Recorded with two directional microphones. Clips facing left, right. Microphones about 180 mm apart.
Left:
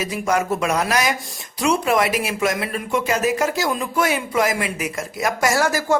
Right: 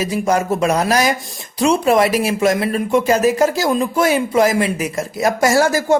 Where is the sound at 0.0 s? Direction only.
35° right (ahead or behind).